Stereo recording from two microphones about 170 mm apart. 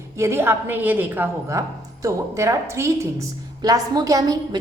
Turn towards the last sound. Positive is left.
turn(degrees=-20)  # may be behind; listen again after turning